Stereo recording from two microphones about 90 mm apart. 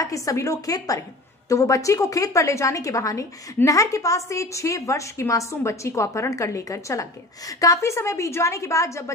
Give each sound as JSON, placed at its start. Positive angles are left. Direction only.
{"t": 0.0, "sound": "a woman's voice", "side_deg": 40}